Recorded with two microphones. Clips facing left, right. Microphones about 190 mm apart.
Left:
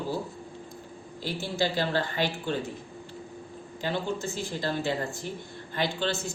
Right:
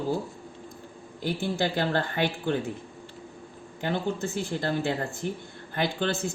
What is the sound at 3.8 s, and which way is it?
Speech, 55° right (ahead or behind).